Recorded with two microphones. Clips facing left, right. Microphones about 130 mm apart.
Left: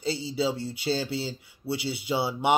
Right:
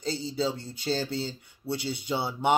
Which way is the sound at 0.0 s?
10° left (ahead or behind).